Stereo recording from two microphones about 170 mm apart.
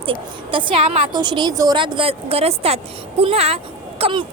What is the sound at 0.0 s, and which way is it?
A woman's voice, 30° right (ahead or behind).